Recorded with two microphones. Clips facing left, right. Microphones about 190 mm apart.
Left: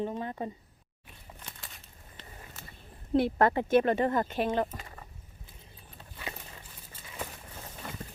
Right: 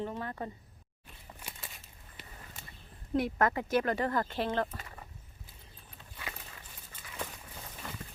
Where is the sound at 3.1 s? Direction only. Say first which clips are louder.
Left 4 dB; 30° left (ahead or behind); by 4.8 s 10° left (ahead or behind).